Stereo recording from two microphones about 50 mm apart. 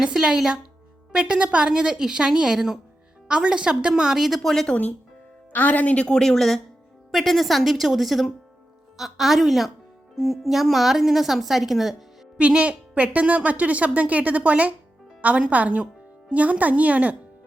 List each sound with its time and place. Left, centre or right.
0.0 s a woman's voice: centre
4.4 s speech: centre
4.7 s speech: left
6.1 s a woman's voice: centre
12.4 s a woman's voice: right